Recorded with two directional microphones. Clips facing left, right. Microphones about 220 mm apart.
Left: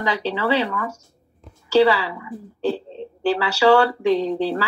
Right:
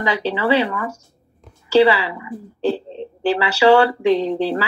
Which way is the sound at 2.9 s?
20° right (ahead or behind).